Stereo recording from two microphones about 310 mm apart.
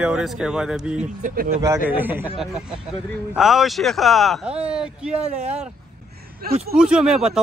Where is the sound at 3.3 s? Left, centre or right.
Centre.